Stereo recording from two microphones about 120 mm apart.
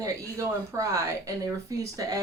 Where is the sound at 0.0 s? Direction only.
25° right (ahead or behind).